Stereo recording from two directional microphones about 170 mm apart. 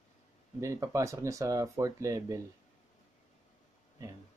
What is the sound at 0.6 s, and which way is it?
Speech, 20° right (ahead or behind).